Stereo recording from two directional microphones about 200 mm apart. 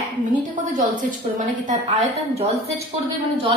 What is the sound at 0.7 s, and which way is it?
Speech, 40° right (ahead or behind).